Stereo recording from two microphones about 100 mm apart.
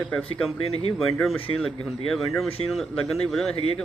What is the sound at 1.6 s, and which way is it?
Speech, centre (ahead or behind).